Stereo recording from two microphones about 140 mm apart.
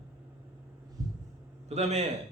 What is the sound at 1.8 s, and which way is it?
Speech, 50° right (ahead or behind).